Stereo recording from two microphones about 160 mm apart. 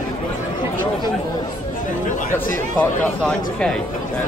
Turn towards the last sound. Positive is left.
turn(degrees=5)  # may be behind; listen again after turning